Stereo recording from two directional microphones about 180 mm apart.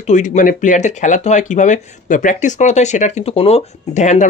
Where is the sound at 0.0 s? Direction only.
40° left (ahead or behind).